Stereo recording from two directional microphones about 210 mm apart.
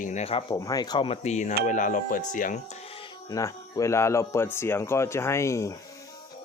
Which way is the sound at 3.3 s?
15° left (ahead or behind).